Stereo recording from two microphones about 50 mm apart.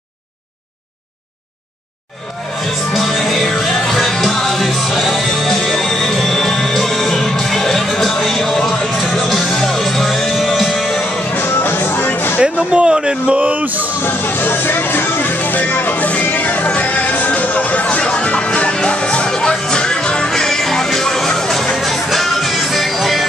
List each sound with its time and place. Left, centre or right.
2.9 s music: centre
11.3 s music: left
12.5 s a sound: centre
13.4 s music: right
14.0 s music: left; by 23.2 s centre